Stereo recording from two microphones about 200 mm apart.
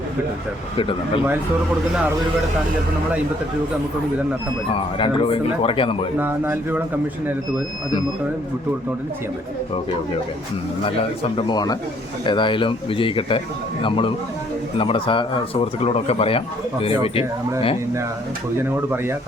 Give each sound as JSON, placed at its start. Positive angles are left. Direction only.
{"t": 0.8, "sound": "speech", "side_deg": 25}
{"t": 4.7, "sound": "speech", "side_deg": 25}
{"t": 6.1, "sound": "speech", "side_deg": -10}
{"t": 10.8, "sound": "speech", "side_deg": 25}
{"t": 18.5, "sound": "speech", "side_deg": -10}